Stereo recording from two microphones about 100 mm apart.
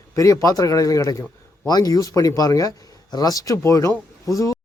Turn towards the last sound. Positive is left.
turn(degrees=35)  # may be behind; listen again after turning